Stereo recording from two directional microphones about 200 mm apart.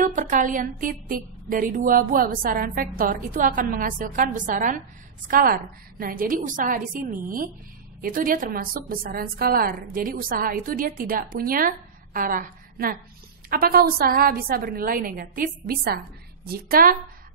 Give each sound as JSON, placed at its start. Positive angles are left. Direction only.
{"t": 0.0, "sound": "a woman's voice", "side_deg": -40}